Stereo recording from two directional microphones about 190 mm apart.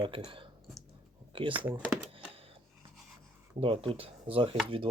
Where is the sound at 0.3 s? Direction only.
25° right (ahead or behind).